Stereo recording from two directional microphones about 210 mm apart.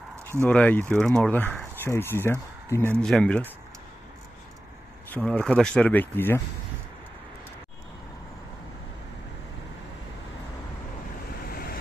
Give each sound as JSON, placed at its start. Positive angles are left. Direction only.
{"t": 0.4, "sound": "speech", "side_deg": 5}
{"t": 5.1, "sound": "speech", "side_deg": 5}
{"t": 11.4, "sound": "vehicle", "side_deg": 45}